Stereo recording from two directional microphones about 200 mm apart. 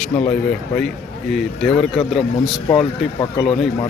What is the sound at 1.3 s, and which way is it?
Speech, centre (ahead or behind).